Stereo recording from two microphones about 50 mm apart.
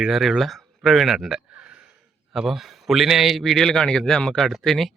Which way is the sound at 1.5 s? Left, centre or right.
Right.